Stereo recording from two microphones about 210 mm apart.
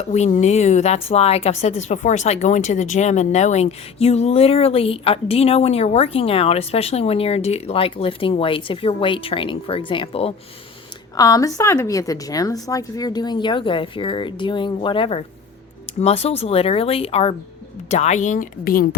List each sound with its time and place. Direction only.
0.1 s speech: 35° left (ahead or behind)
11.2 s speech: 15° left (ahead or behind); by 18.9 s 45° left (ahead or behind)